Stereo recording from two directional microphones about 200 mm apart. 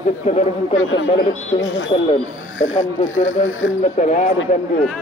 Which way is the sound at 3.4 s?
75° left (ahead or behind).